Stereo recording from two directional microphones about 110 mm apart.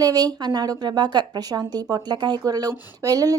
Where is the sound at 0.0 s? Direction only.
35° right (ahead or behind).